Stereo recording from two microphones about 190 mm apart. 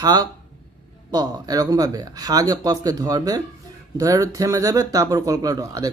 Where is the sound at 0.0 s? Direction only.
20° right (ahead or behind).